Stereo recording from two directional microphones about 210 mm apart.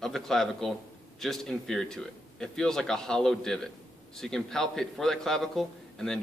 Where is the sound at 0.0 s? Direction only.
Centre (ahead or behind).